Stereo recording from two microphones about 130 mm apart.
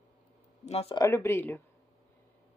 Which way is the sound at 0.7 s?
55° left (ahead or behind).